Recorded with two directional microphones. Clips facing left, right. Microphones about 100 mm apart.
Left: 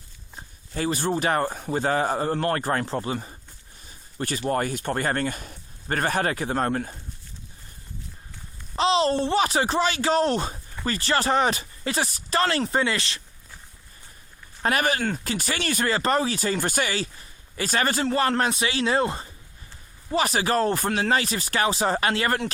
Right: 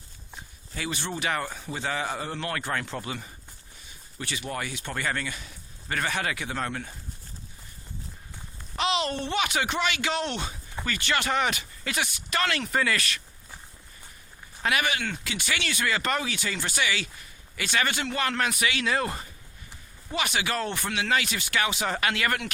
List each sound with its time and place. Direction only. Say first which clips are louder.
0.3 s speech: left 7 dB; 40° left (ahead or behind)
8.7 s speech: left 6 dB; 30° left (ahead or behind)
14.6 s speech: left 4 dB; 40° left (ahead or behind)